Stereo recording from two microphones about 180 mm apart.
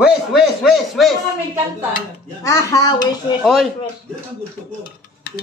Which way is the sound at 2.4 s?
20° left (ahead or behind).